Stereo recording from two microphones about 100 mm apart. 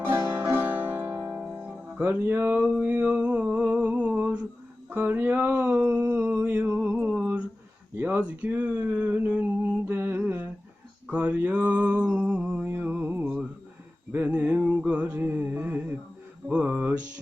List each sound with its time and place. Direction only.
0.3 s music: 25° right (ahead or behind)
1.0 s music: 35° right (ahead or behind)
2.0 s music: 20° right (ahead or behind)
2.7 s a sound: 15° right (ahead or behind)
6.7 s music: 10° right (ahead or behind)
7.1 s a sound: 10° right (ahead or behind)
7.9 s speech: 15° right (ahead or behind)
11.1 s mantra: 15° right (ahead or behind)
14.1 s a sound: 15° right (ahead or behind)
16.5 s music: 15° right (ahead or behind)